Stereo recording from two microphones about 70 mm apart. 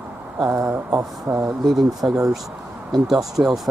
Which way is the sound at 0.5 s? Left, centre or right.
Right.